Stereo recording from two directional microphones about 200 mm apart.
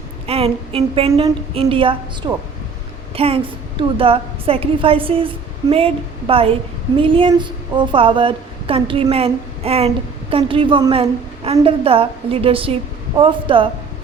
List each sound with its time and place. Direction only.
0.3 s a woman's voice: 30° right (ahead or behind)